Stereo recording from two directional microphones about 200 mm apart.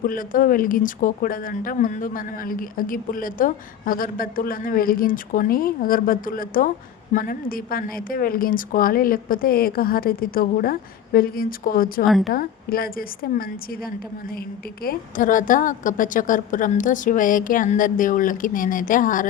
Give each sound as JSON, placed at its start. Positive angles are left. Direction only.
{"t": 0.0, "sound": "speech", "side_deg": 45}
{"t": 12.0, "sound": "a woman's voice", "side_deg": 0}
{"t": 12.3, "sound": "a woman's voice", "side_deg": 50}